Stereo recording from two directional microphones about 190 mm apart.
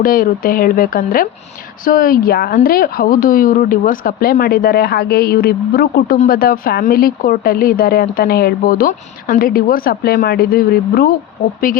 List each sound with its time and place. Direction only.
0.0 s a woman's voice: 50° left (ahead or behind)